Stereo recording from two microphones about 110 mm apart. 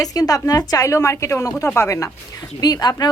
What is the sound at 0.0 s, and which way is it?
A woman's voice, 35° left (ahead or behind).